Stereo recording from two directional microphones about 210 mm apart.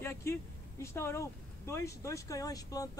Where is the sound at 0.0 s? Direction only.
10° left (ahead or behind).